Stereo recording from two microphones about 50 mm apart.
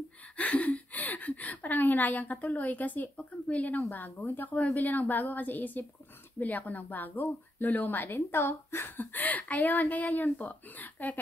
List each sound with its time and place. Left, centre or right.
0.4 s speech: left